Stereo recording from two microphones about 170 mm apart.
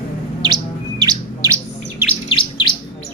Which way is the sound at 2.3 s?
30° left (ahead or behind).